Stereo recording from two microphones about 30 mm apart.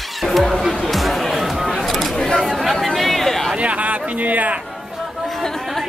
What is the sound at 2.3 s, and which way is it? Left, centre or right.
Chatter, centre.